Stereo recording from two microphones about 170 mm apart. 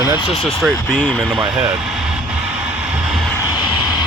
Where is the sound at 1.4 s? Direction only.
20° right (ahead or behind).